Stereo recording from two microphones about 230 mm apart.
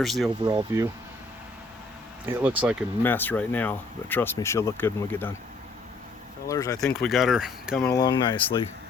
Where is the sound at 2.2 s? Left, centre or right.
Centre.